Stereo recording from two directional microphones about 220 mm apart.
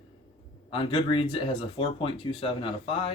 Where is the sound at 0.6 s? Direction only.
25° left (ahead or behind).